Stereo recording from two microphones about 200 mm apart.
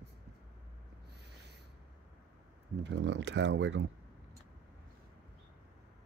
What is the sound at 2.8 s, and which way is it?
Speech, 65° right (ahead or behind).